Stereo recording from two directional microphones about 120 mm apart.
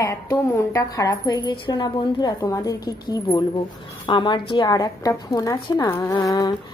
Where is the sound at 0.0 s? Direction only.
25° left (ahead or behind).